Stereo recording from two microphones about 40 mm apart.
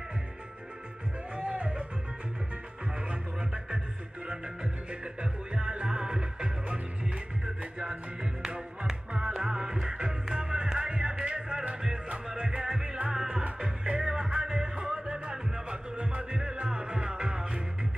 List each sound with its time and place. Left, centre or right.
1.3 s music: right
3.1 s music: right
5.0 s music: right
9.3 s music: centre